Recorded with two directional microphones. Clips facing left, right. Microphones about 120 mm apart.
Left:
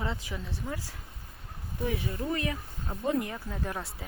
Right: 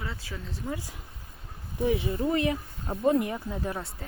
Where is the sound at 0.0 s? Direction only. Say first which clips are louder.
Left 3 dB; 20° left (ahead or behind).